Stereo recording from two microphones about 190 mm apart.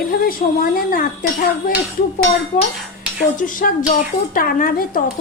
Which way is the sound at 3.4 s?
45° left (ahead or behind).